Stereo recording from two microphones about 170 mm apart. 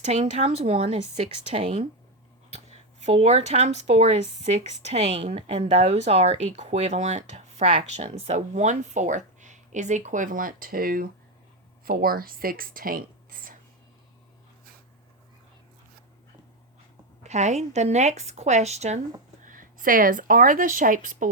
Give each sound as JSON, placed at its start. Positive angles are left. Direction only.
{"t": 0.0, "sound": "speech", "side_deg": -40}
{"t": 17.2, "sound": "speech", "side_deg": -40}
{"t": 19.5, "sound": "speech", "side_deg": -50}